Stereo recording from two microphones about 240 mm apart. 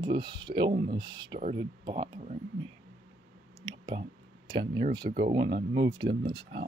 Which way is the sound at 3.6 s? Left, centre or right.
Centre.